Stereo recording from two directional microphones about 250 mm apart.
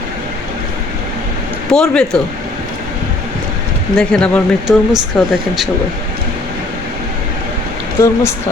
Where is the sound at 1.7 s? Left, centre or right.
Centre.